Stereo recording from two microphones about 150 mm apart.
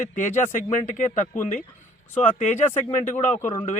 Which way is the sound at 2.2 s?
50° left (ahead or behind).